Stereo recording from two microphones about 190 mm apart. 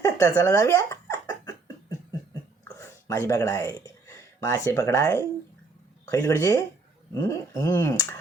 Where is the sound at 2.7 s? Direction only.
15° left (ahead or behind).